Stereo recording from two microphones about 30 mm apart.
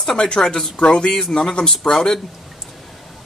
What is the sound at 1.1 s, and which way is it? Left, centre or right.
Speech, centre.